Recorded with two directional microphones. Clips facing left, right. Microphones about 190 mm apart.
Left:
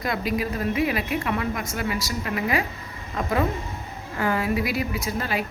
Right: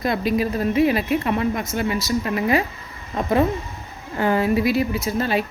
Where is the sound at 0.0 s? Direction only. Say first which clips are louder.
Right 5 dB; 25° right (ahead or behind).